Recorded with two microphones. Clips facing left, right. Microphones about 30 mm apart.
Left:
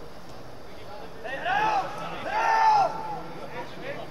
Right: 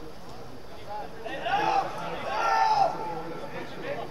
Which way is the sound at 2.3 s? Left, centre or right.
Left.